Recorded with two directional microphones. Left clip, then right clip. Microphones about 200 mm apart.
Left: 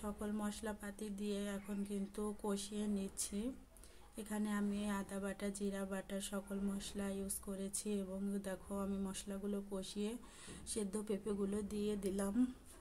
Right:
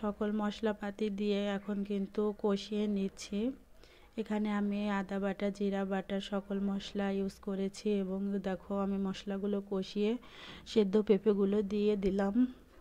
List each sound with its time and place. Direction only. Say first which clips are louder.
0.0 s speech: right 9 dB; 30° right (ahead or behind)